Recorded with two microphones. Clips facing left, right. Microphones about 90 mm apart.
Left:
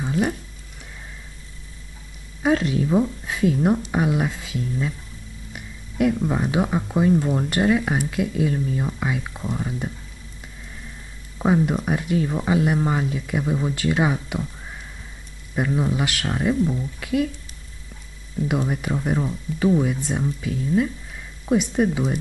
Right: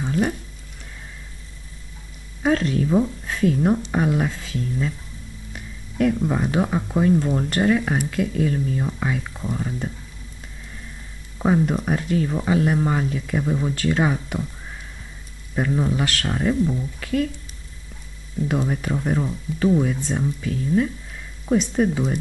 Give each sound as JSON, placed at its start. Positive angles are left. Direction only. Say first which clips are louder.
{"t": 0.0, "sound": "a sound", "louder": "even", "side_deg": 5}
{"t": 2.4, "sound": "speech", "louder": "even", "side_deg": 10}
{"t": 11.3, "sound": "speech", "louder": "even", "side_deg": 5}
{"t": 15.5, "sound": "speech", "louder": "right 1 dB", "side_deg": 5}
{"t": 18.5, "sound": "speech", "louder": "even", "side_deg": 5}